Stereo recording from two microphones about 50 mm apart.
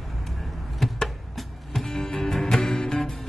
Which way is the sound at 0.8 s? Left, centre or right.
Centre.